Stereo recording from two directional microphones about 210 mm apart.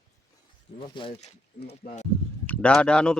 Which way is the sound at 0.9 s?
25° left (ahead or behind).